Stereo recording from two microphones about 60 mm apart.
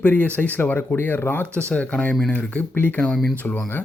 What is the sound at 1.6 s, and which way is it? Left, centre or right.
Speech, centre.